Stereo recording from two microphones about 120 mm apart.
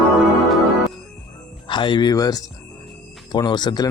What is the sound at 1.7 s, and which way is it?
Speech, 40° left (ahead or behind).